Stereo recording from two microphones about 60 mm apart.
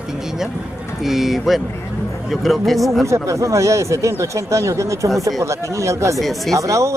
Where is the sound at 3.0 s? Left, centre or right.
Right.